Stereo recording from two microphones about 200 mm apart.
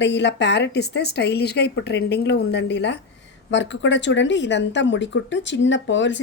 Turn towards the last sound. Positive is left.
turn(degrees=65)  # may be behind; listen again after turning